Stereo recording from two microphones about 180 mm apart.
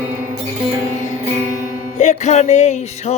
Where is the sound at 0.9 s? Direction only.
40° left (ahead or behind).